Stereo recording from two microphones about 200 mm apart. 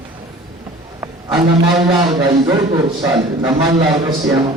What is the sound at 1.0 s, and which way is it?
A man's voice, 25° right (ahead or behind).